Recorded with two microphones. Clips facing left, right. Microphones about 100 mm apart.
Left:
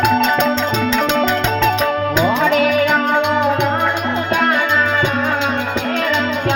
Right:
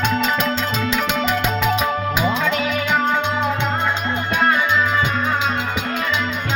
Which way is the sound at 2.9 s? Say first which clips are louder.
Left 4 dB; 10° left (ahead or behind).